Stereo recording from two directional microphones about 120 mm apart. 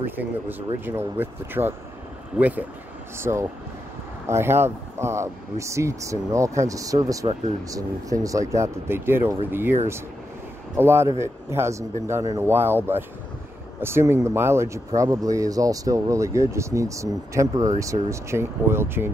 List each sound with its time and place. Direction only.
0.0 s speech: 15° right (ahead or behind)
10.8 s speech: 20° right (ahead or behind)